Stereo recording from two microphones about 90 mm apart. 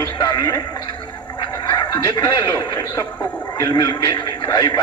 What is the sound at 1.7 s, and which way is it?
A man's voice, 45° left (ahead or behind).